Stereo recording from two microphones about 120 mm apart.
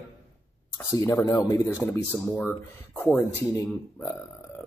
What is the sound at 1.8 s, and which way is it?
A man's voice, 15° left (ahead or behind).